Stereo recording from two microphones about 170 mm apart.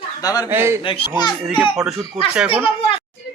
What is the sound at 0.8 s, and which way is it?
Speech, 35° left (ahead or behind).